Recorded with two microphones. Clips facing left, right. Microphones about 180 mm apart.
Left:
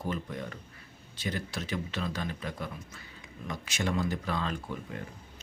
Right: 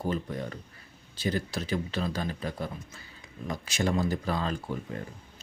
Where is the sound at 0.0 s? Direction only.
35° right (ahead or behind).